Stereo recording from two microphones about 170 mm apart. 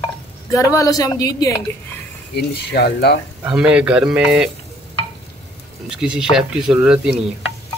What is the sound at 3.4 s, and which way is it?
Speech, 5° right (ahead or behind).